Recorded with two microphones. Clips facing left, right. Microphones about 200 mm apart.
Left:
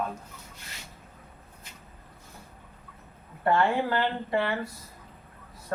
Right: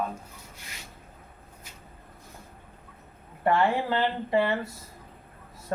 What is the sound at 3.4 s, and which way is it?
A man's voice, 20° right (ahead or behind).